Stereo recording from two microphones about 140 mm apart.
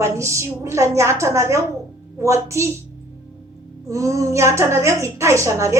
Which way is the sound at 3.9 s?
25° right (ahead or behind).